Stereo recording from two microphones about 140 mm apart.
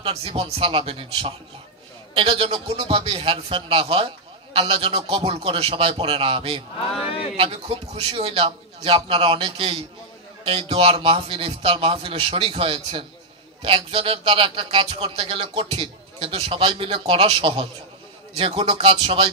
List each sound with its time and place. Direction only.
0.0 s speech: 45° right (ahead or behind)